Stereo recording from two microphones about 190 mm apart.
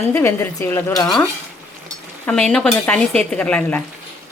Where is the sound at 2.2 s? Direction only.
5° left (ahead or behind).